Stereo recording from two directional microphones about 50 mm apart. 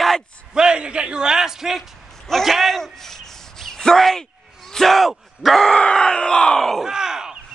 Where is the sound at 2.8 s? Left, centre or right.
Centre.